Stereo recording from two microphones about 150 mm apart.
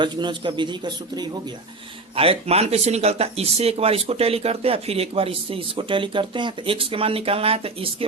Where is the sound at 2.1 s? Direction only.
40° right (ahead or behind).